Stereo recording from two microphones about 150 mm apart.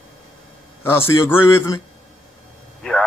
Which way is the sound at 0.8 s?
15° left (ahead or behind).